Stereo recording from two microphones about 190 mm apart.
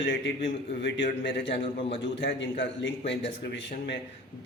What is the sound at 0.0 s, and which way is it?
Speech, 65° left (ahead or behind).